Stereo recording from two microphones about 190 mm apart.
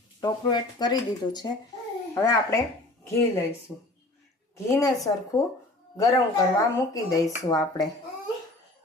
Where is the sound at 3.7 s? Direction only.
15° left (ahead or behind).